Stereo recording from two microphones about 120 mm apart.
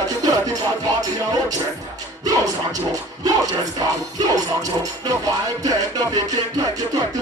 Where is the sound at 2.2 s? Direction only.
30° right (ahead or behind).